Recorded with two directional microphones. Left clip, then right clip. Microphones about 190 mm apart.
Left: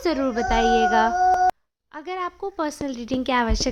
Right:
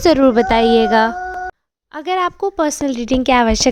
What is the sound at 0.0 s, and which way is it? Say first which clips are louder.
A woman's voice: right 11 dB; 40° right (ahead or behind).